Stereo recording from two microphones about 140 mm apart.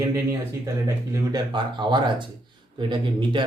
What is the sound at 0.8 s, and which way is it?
Speech, 25° right (ahead or behind).